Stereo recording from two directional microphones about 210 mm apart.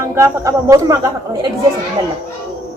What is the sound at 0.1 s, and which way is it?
A child's voice, 10° right (ahead or behind).